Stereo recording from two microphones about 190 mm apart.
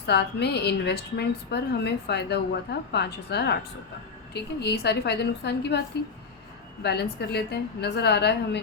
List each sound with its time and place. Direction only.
0.1 s a woman's voice: 60° left (ahead or behind)
6.8 s a woman's voice: 60° left (ahead or behind)